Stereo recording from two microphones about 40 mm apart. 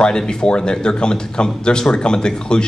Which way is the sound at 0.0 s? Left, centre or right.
Left.